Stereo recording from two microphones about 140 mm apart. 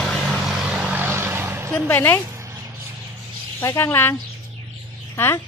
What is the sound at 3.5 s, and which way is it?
Speech, 20° left (ahead or behind).